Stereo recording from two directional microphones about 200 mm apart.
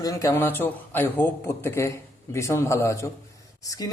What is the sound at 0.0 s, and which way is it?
A man's voice, 15° left (ahead or behind).